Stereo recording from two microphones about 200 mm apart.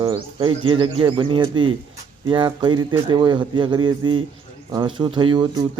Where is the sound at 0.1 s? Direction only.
20° right (ahead or behind).